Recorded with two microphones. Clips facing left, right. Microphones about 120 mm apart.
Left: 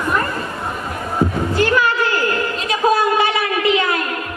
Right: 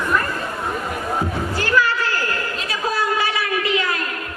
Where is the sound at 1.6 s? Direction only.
20° left (ahead or behind).